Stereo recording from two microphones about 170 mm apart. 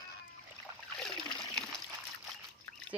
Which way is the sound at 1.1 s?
30° left (ahead or behind).